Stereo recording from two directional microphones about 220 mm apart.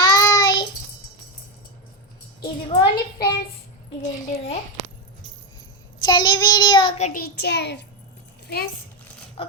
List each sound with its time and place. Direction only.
0.0 s child singing: 15° left (ahead or behind)
2.4 s child singing: 25° left (ahead or behind)
4.0 s a child's voice: 30° left (ahead or behind)
6.1 s child singing: 20° left (ahead or behind)
7.1 s a child's voice: 45° left (ahead or behind)
9.4 s dog: 25° left (ahead or behind)